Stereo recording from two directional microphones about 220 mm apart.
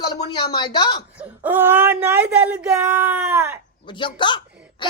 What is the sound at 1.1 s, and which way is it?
Speech, 10° right (ahead or behind).